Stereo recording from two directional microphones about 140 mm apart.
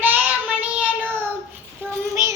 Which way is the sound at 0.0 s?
15° right (ahead or behind).